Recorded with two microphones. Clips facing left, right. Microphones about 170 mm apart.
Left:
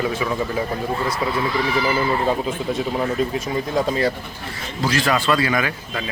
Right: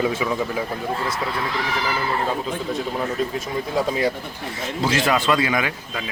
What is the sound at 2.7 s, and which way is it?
Speech, centre (ahead or behind).